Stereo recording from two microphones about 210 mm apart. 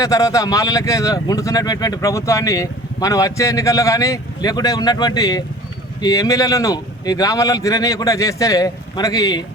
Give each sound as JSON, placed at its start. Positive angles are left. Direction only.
{"t": 0.0, "sound": "speech", "side_deg": 15}